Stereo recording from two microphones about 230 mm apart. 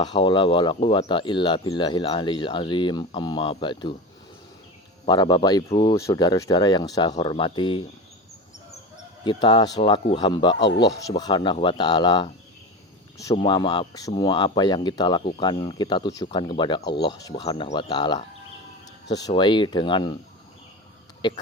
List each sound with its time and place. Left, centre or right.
0.0 s speech: centre
5.0 s speech: centre
9.2 s speech: centre
21.2 s speech: centre